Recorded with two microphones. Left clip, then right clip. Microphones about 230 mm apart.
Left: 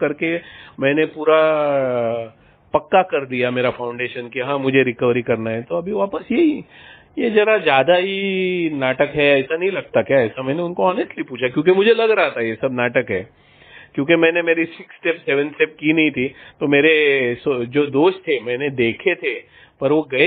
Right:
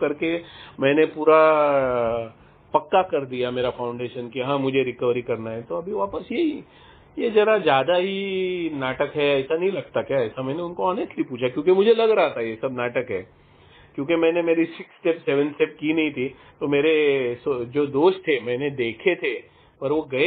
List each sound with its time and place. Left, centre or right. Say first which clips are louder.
0.0 s a man's voice: left 3 dB; left